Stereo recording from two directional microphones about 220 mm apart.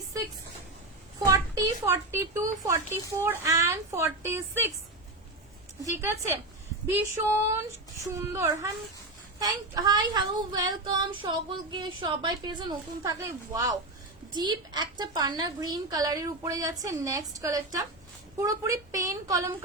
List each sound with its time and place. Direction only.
1.2 s speech: 15° right (ahead or behind)
6.0 s speech: 10° right (ahead or behind)